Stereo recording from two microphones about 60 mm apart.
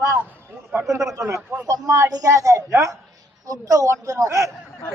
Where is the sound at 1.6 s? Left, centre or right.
Right.